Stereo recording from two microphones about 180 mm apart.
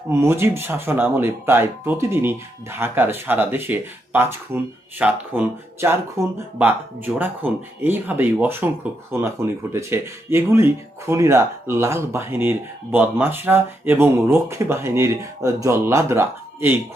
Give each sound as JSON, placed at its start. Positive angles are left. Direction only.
{"t": 0.1, "sound": "speech", "side_deg": -15}